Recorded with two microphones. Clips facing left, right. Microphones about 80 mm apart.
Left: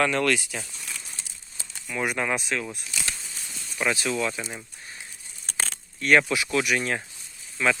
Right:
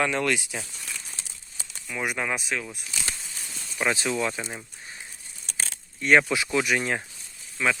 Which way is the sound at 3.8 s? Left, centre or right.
Right.